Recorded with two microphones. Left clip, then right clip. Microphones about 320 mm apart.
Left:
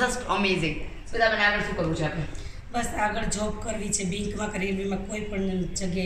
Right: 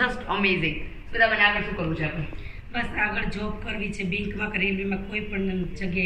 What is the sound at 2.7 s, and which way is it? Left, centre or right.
A woman's voice, centre.